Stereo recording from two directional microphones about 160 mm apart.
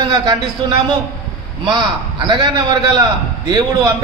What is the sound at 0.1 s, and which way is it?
A man's voice, 25° right (ahead or behind).